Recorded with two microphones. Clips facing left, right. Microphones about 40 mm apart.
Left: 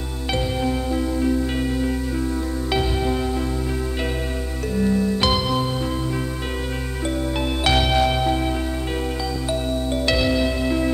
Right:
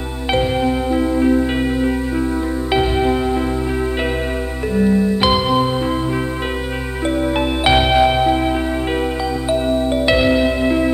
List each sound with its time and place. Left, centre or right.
0.3 s music: right
4.7 s music: right
7.3 s music: right